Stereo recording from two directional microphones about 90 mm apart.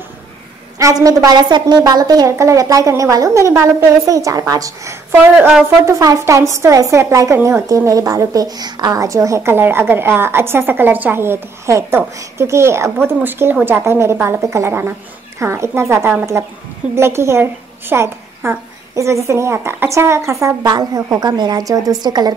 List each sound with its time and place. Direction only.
0.7 s a woman's voice: 40° right (ahead or behind)
20.6 s a woman's voice: 45° right (ahead or behind)